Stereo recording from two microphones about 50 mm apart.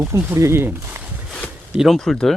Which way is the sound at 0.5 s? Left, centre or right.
Right.